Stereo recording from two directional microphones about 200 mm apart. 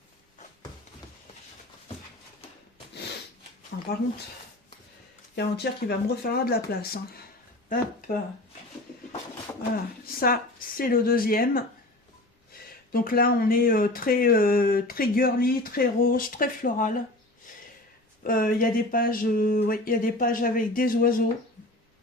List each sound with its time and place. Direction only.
2.9 s snort: 55° left (ahead or behind)
5.4 s speech: 55° left (ahead or behind)
9.7 s a woman's voice: 45° left (ahead or behind)
12.9 s speech: 45° left (ahead or behind)
18.2 s speech: 45° left (ahead or behind)